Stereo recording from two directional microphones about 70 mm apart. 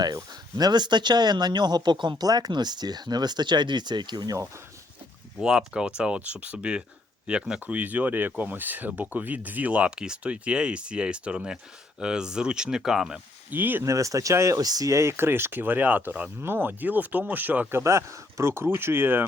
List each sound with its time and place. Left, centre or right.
0.0 s speech: right
5.4 s speech: centre
7.6 s speech: right; by 13.1 s centre
13.5 s speech: right
13.8 s speech: right
14.6 s speech: right
17.7 s speech: right